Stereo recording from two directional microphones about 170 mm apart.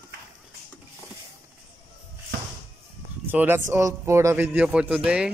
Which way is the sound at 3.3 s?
10° right (ahead or behind).